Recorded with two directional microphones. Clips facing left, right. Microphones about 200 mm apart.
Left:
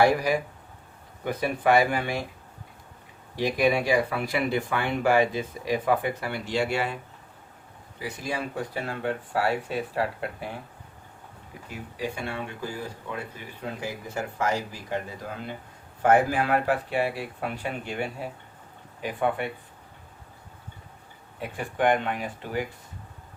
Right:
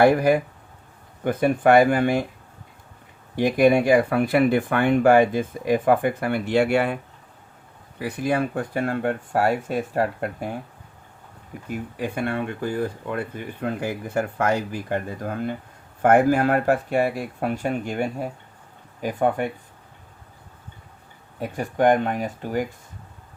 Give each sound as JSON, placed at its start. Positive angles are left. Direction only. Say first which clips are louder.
{"t": 0.0, "sound": "speech", "louder": "right 5 dB", "side_deg": -55}
{"t": 3.3, "sound": "speech", "louder": "right 6 dB", "side_deg": -50}
{"t": 11.7, "sound": "speech", "louder": "right 5 dB", "side_deg": -55}
{"t": 21.3, "sound": "speech", "louder": "right 5 dB", "side_deg": -40}